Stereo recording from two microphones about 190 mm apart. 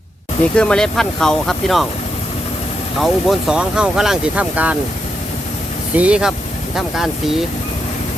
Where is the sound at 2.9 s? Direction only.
Centre (ahead or behind).